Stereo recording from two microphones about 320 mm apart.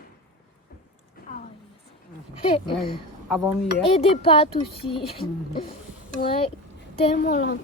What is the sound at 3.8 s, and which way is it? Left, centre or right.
Speech, centre.